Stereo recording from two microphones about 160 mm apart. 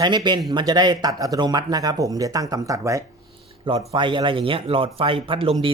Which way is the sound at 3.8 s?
30° right (ahead or behind).